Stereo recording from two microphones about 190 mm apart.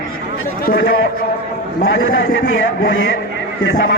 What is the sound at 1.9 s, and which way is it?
A man's voice, 90° left.